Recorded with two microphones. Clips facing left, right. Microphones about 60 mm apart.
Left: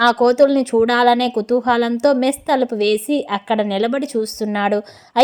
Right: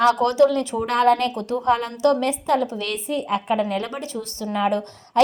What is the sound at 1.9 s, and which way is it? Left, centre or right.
A woman's voice, left.